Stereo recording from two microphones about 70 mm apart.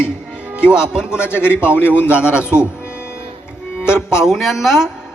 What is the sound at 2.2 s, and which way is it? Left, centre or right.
Speech, centre.